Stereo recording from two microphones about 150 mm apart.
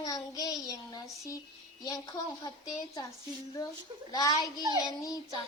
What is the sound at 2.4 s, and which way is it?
Child singing, 25° left (ahead or behind).